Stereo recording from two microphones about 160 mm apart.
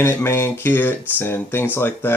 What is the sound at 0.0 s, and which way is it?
Speech, 15° left (ahead or behind).